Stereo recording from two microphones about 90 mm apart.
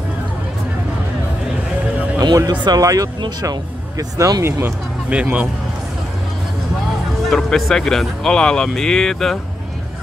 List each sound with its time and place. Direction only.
2.1 s music: 45° right (ahead or behind)
2.6 s speech: 45° right (ahead or behind)
4.2 s speech: 40° right (ahead or behind)
4.5 s speech: 25° right (ahead or behind)
5.1 s speech: 15° right (ahead or behind)
7.2 s speech: 5° left (ahead or behind)